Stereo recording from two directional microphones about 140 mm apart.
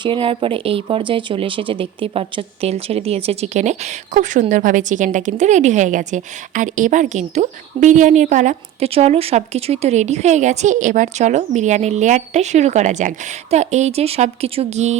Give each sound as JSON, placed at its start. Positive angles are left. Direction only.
{"t": 0.0, "sound": "speech", "side_deg": -40}
{"t": 8.9, "sound": "a woman's voice", "side_deg": -45}